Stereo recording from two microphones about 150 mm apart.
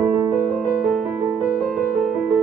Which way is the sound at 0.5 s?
10° left (ahead or behind).